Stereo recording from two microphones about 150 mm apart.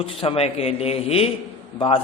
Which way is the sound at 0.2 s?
40° left (ahead or behind).